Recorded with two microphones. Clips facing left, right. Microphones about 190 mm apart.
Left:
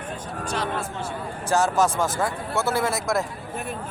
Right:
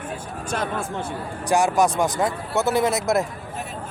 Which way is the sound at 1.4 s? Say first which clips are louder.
Right 2 dB; 15° right (ahead or behind).